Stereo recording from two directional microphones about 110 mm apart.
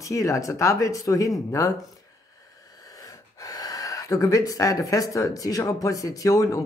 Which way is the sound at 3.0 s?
35° left (ahead or behind).